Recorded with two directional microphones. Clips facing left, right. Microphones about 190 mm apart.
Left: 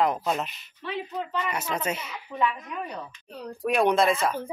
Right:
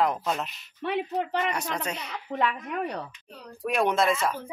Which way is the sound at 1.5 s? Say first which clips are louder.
Left 2 dB; 5° left (ahead or behind).